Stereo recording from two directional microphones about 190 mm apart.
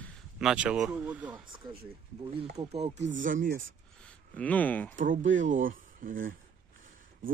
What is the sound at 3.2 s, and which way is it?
Speech, 45° right (ahead or behind).